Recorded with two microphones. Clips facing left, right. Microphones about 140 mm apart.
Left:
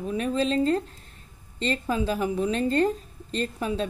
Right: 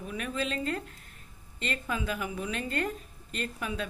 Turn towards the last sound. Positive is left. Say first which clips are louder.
# left 7 dB
turn(degrees=30)  # may be behind; listen again after turning